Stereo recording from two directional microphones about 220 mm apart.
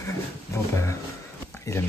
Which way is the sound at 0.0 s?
15° left (ahead or behind).